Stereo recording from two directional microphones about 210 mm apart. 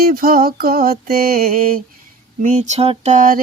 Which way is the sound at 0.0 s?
45° right (ahead or behind).